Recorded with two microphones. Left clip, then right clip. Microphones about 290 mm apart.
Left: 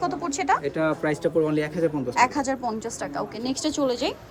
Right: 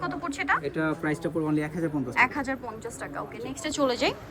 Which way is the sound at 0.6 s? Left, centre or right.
Centre.